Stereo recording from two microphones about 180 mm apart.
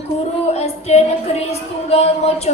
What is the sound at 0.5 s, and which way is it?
Music, 35° left (ahead or behind).